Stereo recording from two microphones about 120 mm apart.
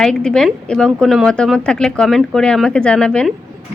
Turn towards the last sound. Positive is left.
turn(degrees=5)  # may be behind; listen again after turning